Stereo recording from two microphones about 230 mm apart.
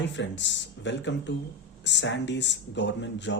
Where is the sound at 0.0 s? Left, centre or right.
Left.